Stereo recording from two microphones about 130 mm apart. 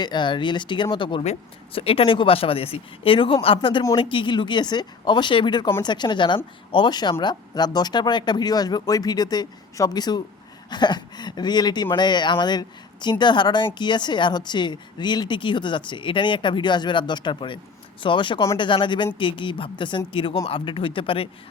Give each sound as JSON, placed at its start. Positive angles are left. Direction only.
{"t": 0.0, "sound": "speech", "side_deg": 35}
{"t": 1.2, "sound": "speech", "side_deg": 50}